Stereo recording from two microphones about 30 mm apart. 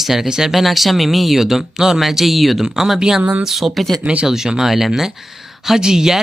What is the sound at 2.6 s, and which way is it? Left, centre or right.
Speech, centre.